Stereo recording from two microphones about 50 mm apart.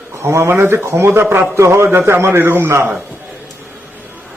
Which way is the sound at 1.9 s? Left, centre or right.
Right.